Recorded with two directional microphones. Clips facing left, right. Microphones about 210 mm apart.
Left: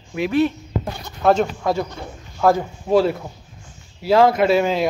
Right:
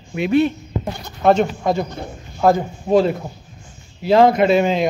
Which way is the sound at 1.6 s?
20° right (ahead or behind).